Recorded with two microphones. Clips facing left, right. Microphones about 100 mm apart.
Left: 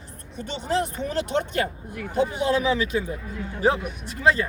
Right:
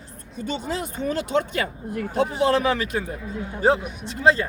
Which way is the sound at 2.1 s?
80° right.